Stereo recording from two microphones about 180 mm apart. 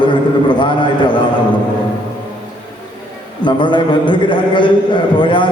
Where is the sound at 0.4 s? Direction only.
25° left (ahead or behind).